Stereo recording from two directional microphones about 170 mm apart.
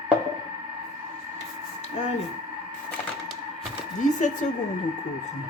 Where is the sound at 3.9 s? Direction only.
45° left (ahead or behind).